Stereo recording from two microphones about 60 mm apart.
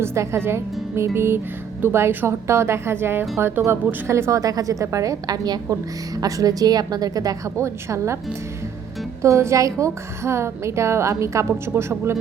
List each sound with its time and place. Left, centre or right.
0.0 s a woman's voice: right
6.1 s a woman's voice: right
7.6 s a woman's voice: right
9.4 s a woman's voice: right
11.5 s a woman's voice: right